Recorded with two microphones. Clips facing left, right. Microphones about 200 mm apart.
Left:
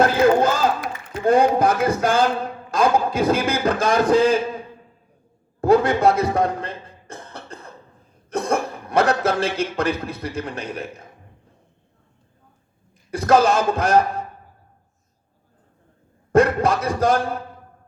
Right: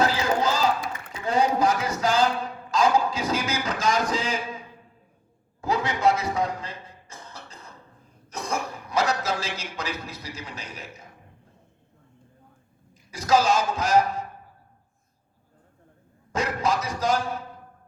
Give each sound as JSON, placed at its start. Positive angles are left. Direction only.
{"t": 0.0, "sound": "a sound", "side_deg": 55}
{"t": 5.5, "sound": "cough", "side_deg": 55}
{"t": 8.3, "sound": "speech", "side_deg": 55}
{"t": 13.1, "sound": "speech", "side_deg": 55}
{"t": 16.3, "sound": "speech", "side_deg": 55}